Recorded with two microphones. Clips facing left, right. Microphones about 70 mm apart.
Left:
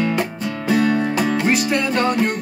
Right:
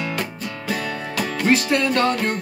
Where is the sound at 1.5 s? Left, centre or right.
Centre.